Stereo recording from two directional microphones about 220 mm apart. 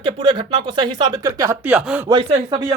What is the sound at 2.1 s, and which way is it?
Speech, 20° right (ahead or behind).